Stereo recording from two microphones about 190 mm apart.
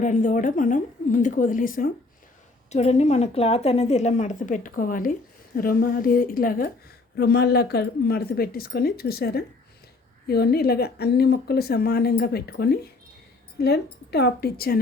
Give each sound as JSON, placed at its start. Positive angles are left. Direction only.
{"t": 0.0, "sound": "a woman's voice", "side_deg": 40}
{"t": 2.6, "sound": "a woman's voice", "side_deg": 35}
{"t": 7.2, "sound": "a woman's voice", "side_deg": 60}